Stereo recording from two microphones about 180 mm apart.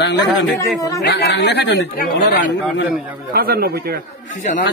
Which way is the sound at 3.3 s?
60° right (ahead or behind).